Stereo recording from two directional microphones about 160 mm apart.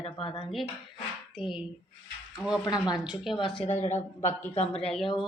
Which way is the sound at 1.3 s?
5° right (ahead or behind).